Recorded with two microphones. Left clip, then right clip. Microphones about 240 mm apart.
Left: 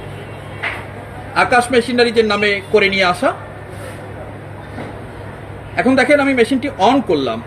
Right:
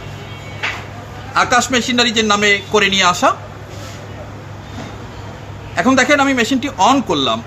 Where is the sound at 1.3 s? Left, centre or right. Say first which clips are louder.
Left 1 dB; right.